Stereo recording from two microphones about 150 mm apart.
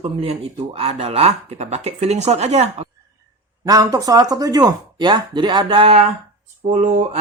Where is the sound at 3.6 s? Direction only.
25° right (ahead or behind); by 6.1 s 40° right (ahead or behind).